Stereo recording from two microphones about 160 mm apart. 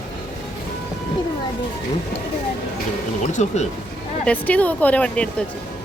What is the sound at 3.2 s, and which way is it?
Speech, 45° left (ahead or behind).